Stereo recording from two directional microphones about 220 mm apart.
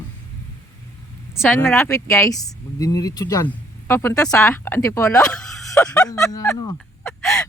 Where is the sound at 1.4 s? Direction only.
10° left (ahead or behind).